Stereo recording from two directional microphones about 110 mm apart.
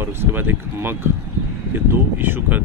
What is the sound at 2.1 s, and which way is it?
Speech, 20° right (ahead or behind).